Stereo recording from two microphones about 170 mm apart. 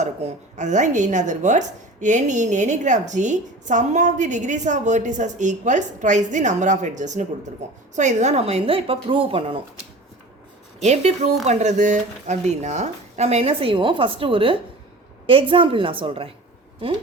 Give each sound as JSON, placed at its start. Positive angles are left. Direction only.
{"t": 0.5, "sound": "a woman's voice", "side_deg": -45}
{"t": 10.8, "sound": "speech", "side_deg": -40}